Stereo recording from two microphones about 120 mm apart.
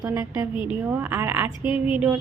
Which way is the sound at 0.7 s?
15° right (ahead or behind).